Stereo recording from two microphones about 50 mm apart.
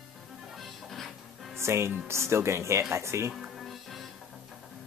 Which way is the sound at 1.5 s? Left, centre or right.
Right.